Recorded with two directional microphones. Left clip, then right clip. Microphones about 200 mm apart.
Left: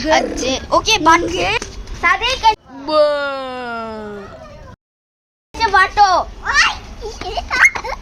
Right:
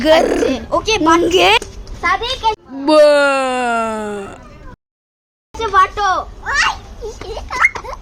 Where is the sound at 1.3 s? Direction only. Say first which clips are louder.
Right 7 dB; 40° right (ahead or behind).